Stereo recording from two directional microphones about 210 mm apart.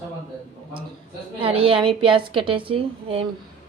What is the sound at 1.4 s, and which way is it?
A woman's voice, 25° right (ahead or behind).